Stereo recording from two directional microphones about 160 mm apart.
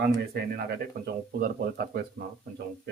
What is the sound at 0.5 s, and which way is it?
Speech, 80° right.